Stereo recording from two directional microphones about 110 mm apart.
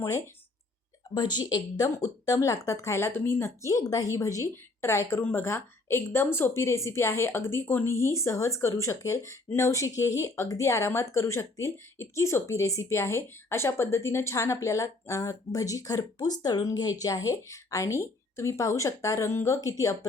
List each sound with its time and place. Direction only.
1.1 s speech: 40° left (ahead or behind)